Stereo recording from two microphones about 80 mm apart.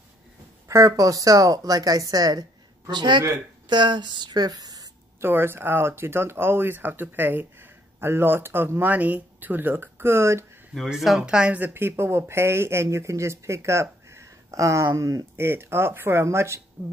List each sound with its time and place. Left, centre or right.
0.7 s speech: right
2.9 s speech: right
5.2 s speech: right
10.9 s speech: centre; by 15.2 s right
15.3 s speech: right